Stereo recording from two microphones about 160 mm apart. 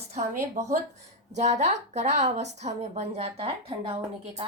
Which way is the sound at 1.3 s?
45° right (ahead or behind).